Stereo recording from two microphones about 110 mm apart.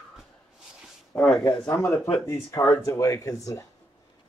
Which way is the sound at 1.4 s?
20° left (ahead or behind).